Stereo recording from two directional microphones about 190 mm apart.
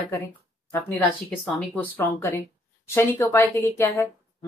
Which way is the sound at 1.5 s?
5° left (ahead or behind).